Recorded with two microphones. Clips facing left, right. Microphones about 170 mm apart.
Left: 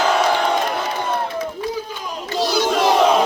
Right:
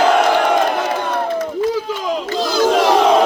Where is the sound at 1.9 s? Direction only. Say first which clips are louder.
Right 9 dB; 90° right.